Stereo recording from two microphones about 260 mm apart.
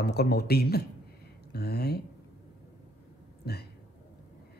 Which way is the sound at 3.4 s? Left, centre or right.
Left.